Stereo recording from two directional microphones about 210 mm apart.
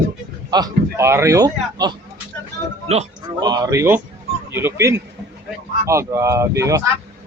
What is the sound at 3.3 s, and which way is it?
A man's voice, 20° right (ahead or behind).